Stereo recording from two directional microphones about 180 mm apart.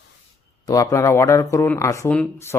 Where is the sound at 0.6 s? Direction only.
20° left (ahead or behind).